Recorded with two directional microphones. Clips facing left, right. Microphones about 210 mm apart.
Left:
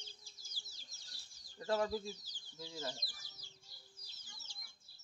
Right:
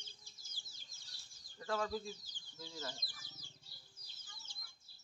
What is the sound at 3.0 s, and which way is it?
Chicken, 50° right (ahead or behind).